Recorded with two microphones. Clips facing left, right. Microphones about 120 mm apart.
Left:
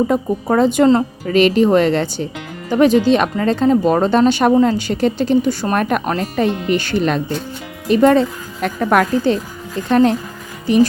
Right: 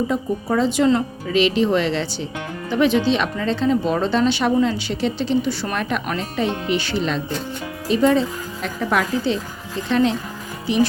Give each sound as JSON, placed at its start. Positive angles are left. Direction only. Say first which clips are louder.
{"t": 0.1, "sound": "a woman's voice", "louder": "left 5 dB", "side_deg": 55}